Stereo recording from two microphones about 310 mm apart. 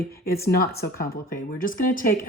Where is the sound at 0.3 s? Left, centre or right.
Left.